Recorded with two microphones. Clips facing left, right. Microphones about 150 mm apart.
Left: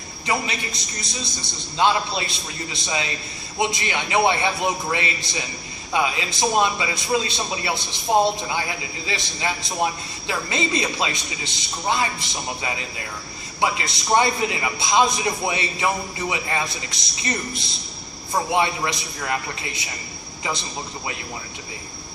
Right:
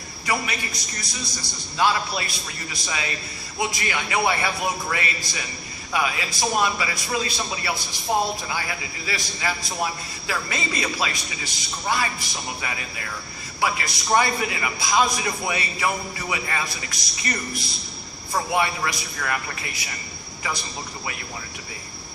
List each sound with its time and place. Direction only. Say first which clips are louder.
0.3 s a man's voice: left 1 dB; 25° left (ahead or behind)